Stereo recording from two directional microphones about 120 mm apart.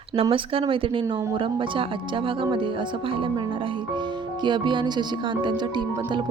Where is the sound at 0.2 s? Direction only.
50° right (ahead or behind).